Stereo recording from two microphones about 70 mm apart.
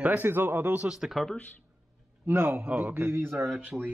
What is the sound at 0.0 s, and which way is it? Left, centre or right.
Speech, right.